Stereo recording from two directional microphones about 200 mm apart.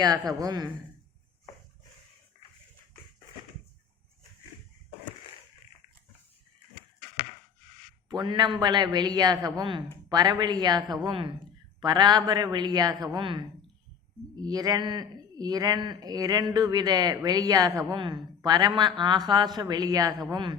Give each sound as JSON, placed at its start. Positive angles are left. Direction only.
{"t": 0.0, "sound": "speech", "side_deg": -20}
{"t": 8.1, "sound": "speech", "side_deg": -20}